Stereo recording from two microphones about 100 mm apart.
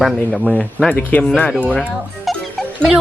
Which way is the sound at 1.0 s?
15° left (ahead or behind).